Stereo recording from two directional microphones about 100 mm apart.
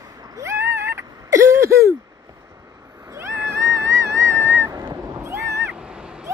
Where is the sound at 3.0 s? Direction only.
30° right (ahead or behind).